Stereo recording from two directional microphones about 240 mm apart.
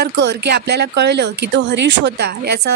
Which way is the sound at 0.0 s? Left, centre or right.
Right.